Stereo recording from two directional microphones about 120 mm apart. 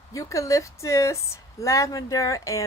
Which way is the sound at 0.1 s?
25° left (ahead or behind).